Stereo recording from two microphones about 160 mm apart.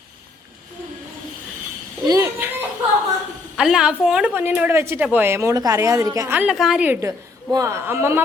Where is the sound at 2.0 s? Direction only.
20° right (ahead or behind).